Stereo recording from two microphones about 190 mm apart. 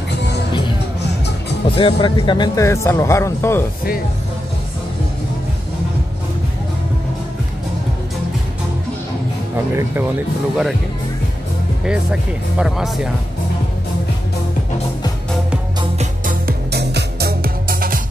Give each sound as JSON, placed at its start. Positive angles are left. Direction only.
{"t": 1.8, "sound": "speech", "side_deg": 25}
{"t": 11.8, "sound": "speech", "side_deg": -5}
{"t": 16.3, "sound": "music", "side_deg": -55}